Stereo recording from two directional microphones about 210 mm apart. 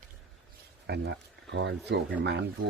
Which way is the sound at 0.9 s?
55° right (ahead or behind).